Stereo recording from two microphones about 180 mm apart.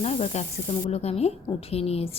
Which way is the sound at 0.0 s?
35° left (ahead or behind).